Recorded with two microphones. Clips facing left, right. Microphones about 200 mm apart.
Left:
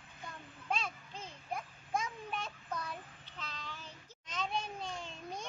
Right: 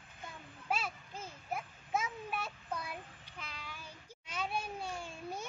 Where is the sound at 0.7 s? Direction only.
5° right (ahead or behind).